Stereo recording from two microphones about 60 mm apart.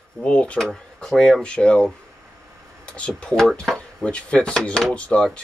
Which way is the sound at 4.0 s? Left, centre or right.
Centre.